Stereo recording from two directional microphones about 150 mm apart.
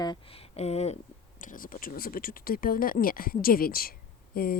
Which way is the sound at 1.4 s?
65° left (ahead or behind).